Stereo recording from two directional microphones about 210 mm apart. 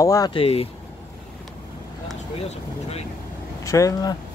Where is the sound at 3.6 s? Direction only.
15° left (ahead or behind).